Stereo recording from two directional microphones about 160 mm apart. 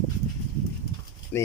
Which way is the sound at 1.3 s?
15° left (ahead or behind).